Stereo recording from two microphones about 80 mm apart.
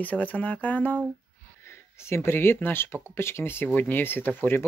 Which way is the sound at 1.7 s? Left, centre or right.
Left.